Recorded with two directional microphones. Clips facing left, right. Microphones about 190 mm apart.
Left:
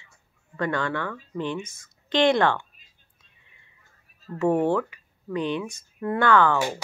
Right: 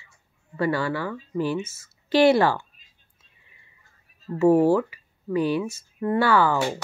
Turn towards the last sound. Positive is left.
turn(degrees=-5)  # may be behind; listen again after turning